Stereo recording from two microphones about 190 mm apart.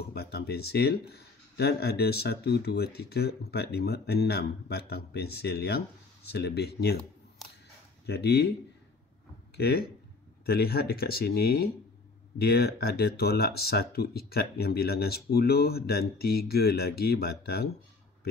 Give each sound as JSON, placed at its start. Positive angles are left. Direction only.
{"t": 0.1, "sound": "speech", "side_deg": 55}
{"t": 8.1, "sound": "speech", "side_deg": 60}
{"t": 9.6, "sound": "speech", "side_deg": 55}